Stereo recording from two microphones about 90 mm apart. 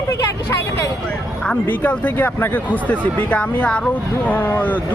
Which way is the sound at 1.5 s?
20° left (ahead or behind).